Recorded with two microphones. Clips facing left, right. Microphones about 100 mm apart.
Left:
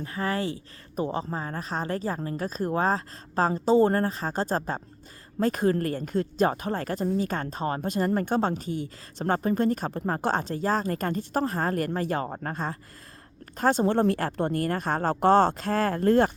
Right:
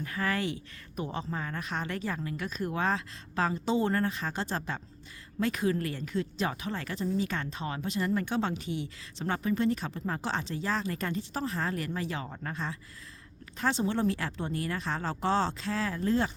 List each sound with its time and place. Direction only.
0.0 s a woman's voice: 30° left (ahead or behind); by 16.3 s 55° left (ahead or behind)